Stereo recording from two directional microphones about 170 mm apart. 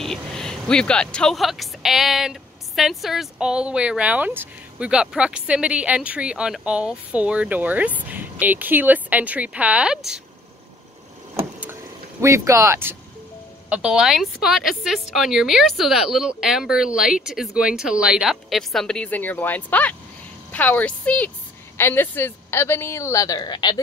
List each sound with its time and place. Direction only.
0.0 s speech: centre (ahead or behind)
12.2 s a woman's voice: 15° right (ahead or behind); by 23.8 s 25° left (ahead or behind)